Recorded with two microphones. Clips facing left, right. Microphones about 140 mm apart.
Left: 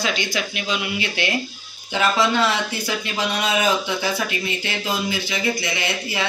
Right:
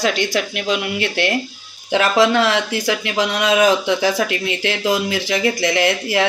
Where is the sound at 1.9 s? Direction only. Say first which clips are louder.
Right 5 dB; 85° right.